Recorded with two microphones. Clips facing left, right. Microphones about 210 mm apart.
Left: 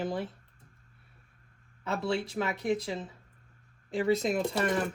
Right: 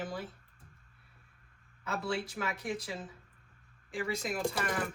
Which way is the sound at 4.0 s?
25° left (ahead or behind).